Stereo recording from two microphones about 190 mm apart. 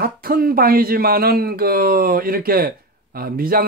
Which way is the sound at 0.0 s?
50° right (ahead or behind).